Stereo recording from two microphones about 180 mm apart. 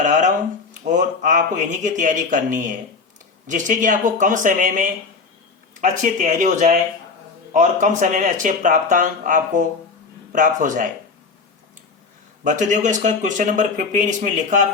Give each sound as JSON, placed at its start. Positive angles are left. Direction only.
{"t": 0.0, "sound": "speech", "side_deg": -45}
{"t": 12.5, "sound": "speech", "side_deg": -45}